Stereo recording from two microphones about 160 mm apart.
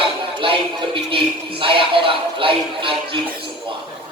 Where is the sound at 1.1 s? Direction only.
35° right (ahead or behind).